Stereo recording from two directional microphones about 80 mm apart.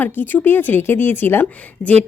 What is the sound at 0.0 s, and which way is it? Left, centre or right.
A woman's voice, left.